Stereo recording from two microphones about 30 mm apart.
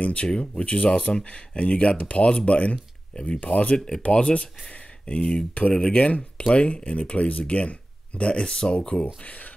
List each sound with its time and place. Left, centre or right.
0.0 s speech: left
1.5 s speech: left
3.7 s speech: left
4.1 s speech: left
5.7 s speech: left
5.9 s speech: left
8.2 s speech: left
9.0 s speech: left